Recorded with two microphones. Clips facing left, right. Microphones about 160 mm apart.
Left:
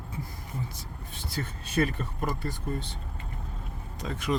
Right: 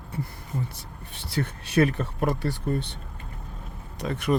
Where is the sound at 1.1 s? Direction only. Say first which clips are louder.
Right 6 dB; 65° right (ahead or behind).